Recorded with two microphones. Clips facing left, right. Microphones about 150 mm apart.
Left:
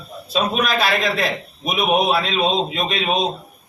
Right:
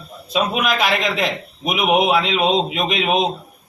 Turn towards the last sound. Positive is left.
turn(degrees=-15)  # may be behind; listen again after turning